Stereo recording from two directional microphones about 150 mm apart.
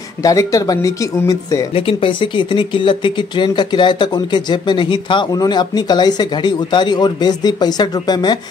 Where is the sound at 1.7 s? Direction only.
35° left (ahead or behind).